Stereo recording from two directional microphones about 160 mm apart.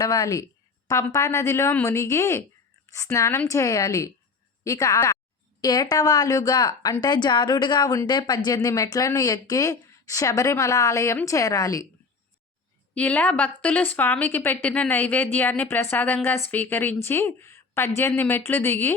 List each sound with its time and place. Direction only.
0.0 s a woman's voice: 25° left (ahead or behind)
12.9 s a woman's voice: 10° left (ahead or behind)